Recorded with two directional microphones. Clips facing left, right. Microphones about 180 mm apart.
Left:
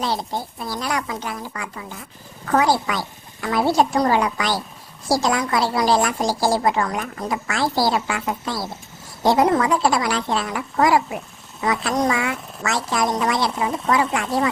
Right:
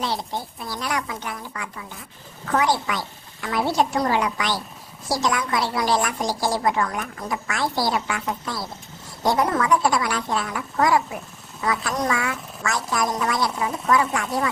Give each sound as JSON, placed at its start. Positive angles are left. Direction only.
{"t": 0.0, "sound": "a woman's voice", "side_deg": 40}